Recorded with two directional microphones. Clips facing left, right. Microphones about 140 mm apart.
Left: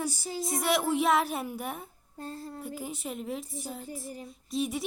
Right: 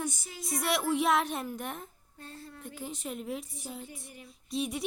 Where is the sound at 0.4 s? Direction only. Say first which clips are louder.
Left 2 dB; centre (ahead or behind).